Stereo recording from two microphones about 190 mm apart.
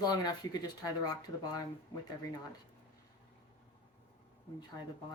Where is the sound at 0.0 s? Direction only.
20° left (ahead or behind).